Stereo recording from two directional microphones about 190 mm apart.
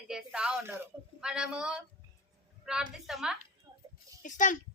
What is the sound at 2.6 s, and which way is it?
Speech, 5° right (ahead or behind).